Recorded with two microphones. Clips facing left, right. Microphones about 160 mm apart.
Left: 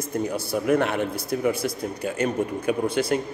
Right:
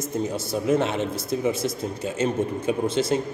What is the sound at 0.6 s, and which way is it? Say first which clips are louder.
Speech: even; 25° right (ahead or behind).